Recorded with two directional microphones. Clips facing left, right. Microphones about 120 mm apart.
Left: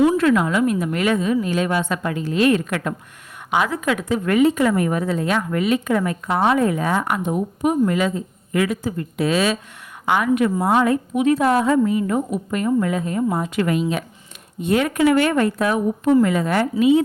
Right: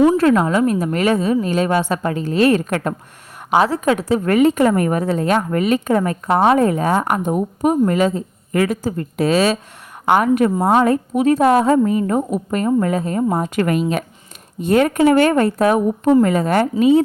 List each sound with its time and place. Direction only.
0.0 s a woman's voice: 35° right (ahead or behind)
4.4 s a woman's voice: 50° right (ahead or behind)